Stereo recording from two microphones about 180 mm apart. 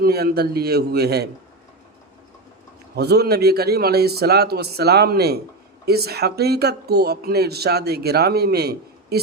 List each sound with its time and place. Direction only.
0.0 s speech: 60° right (ahead or behind)
2.9 s speech: 65° right (ahead or behind)